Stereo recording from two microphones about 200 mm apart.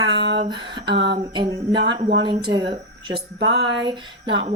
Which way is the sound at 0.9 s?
60° right (ahead or behind).